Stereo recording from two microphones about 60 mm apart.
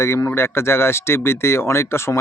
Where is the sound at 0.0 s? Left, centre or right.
Left.